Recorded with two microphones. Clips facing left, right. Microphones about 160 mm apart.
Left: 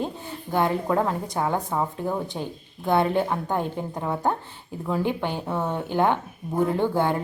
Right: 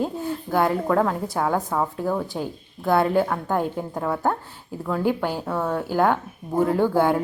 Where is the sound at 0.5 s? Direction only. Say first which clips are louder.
Right 2 dB; centre (ahead or behind).